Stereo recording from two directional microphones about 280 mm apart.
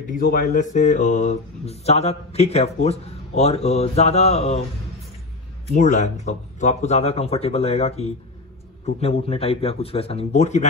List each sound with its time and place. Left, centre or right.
0.1 s speech: left
5.8 s speech: left